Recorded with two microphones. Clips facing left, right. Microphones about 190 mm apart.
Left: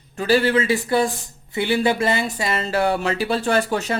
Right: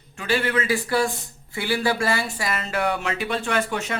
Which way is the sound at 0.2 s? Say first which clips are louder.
Left 6 dB; 35° left (ahead or behind).